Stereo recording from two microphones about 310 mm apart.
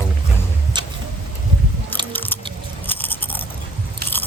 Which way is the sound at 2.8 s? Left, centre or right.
Centre.